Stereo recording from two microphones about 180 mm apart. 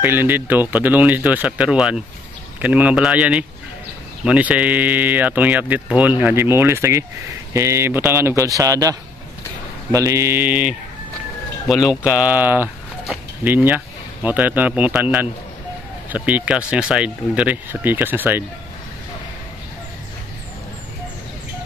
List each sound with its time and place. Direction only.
0.0 s speech: 10° right (ahead or behind)
9.9 s speech: 15° right (ahead or behind)